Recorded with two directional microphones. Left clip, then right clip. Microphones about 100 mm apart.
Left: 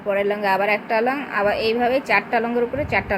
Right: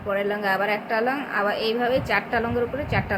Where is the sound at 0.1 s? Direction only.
35° left (ahead or behind).